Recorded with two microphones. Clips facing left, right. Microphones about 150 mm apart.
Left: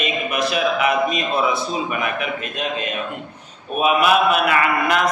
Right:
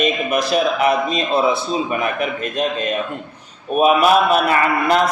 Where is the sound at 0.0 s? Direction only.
40° right (ahead or behind).